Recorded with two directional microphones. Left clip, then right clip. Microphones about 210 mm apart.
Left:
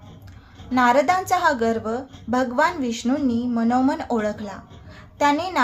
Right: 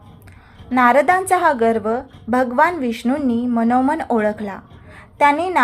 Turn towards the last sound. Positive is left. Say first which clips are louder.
# right 5 dB
turn(degrees=-15)  # may be behind; listen again after turning